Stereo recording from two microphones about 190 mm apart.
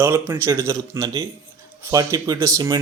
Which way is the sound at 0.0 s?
15° right (ahead or behind).